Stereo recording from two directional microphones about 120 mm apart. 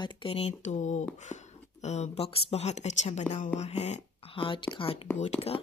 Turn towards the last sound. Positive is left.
turn(degrees=55)  # may be behind; listen again after turning